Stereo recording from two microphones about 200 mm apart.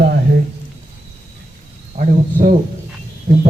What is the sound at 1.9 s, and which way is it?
Speech, 40° right (ahead or behind).